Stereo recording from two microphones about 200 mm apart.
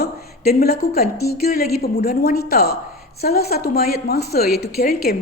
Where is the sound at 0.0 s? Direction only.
50° left (ahead or behind).